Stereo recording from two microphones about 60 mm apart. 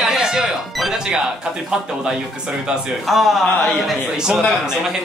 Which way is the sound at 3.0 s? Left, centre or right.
Centre.